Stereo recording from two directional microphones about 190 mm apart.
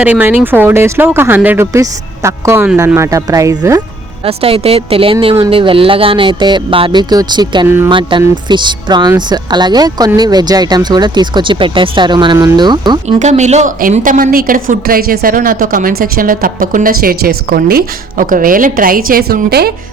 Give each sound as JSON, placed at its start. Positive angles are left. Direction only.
{"t": 0.0, "sound": "speech", "side_deg": -10}
{"t": 4.2, "sound": "a woman's voice", "side_deg": -30}
{"t": 13.1, "sound": "a woman's voice", "side_deg": -35}